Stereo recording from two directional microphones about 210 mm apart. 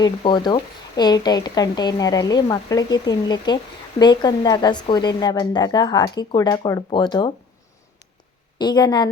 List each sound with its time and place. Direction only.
0.0 s speech: 20° left (ahead or behind)
8.5 s speech: 20° left (ahead or behind)